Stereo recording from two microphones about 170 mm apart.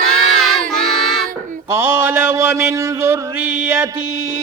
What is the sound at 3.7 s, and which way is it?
Music, 20° right (ahead or behind).